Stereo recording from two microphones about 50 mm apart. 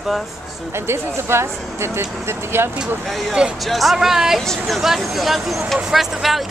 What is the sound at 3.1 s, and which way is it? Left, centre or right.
Speech, centre.